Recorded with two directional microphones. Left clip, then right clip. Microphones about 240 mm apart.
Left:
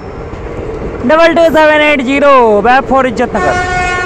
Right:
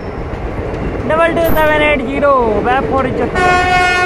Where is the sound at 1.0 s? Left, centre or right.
Left.